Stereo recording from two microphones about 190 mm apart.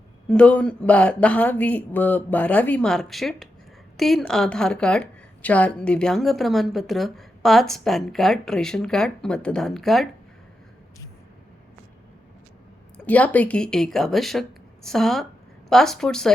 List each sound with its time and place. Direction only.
0.3 s a woman's voice: 5° left (ahead or behind)
13.1 s a woman's voice: 10° left (ahead or behind)